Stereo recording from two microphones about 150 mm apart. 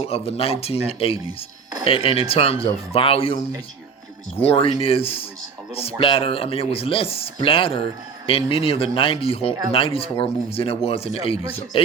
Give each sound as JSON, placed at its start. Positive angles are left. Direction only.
{"t": 0.0, "sound": "speech", "side_deg": 40}